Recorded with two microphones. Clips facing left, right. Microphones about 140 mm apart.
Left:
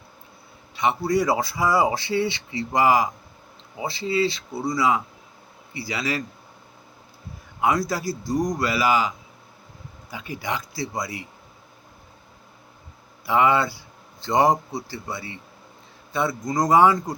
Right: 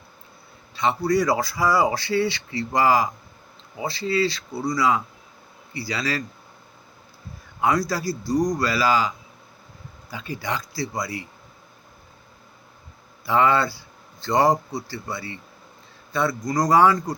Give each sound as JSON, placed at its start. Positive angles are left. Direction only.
{"t": 0.8, "sound": "speech", "side_deg": 20}
{"t": 7.9, "sound": "speech", "side_deg": 20}
{"t": 13.2, "sound": "speech", "side_deg": 15}